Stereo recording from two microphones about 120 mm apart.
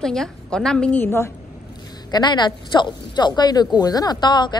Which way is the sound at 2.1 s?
40° left (ahead or behind).